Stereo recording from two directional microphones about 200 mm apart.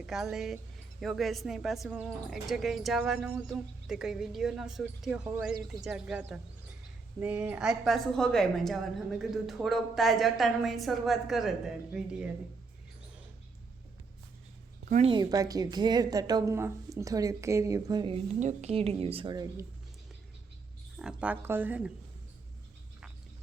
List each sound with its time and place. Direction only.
0.0 s a woman's voice: centre (ahead or behind)
14.8 s speech: 35° right (ahead or behind)
15.1 s a woman's voice: 20° right (ahead or behind)
18.3 s a woman's voice: 35° right (ahead or behind)
20.9 s a woman's voice: 5° right (ahead or behind)